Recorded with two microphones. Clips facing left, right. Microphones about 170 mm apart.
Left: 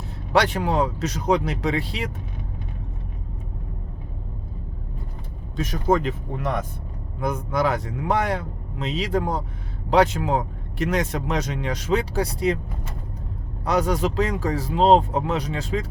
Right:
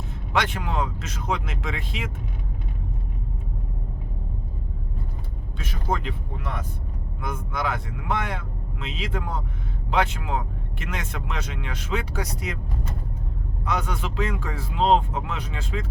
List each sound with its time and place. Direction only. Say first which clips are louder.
0.3 s speech: left 6 dB; 35° left (ahead or behind)
5.5 s speech: left 8 dB; 40° left (ahead or behind)
13.7 s speech: left 7 dB; 40° left (ahead or behind)